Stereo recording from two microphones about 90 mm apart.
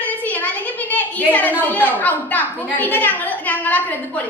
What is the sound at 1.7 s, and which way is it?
A woman's voice, 20° left (ahead or behind).